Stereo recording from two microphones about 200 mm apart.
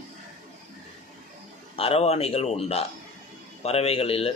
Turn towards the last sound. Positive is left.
turn(degrees=30)  # may be behind; listen again after turning